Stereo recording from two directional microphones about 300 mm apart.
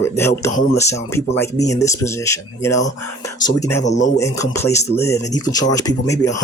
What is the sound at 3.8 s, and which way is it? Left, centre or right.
Speech, left.